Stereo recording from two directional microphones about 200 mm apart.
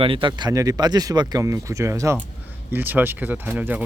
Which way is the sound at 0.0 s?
25° right (ahead or behind).